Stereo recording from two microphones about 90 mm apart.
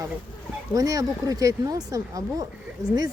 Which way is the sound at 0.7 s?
45° right (ahead or behind).